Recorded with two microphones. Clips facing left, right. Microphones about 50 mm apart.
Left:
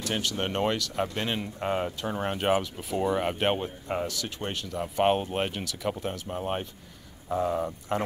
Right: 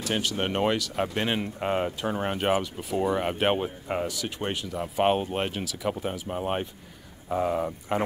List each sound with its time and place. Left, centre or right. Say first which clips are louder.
0.0 s speech: right 2 dB; centre